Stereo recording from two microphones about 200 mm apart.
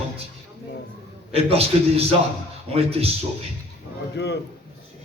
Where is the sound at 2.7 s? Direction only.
30° right (ahead or behind).